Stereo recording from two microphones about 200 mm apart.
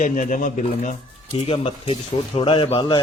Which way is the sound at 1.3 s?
30° left (ahead or behind).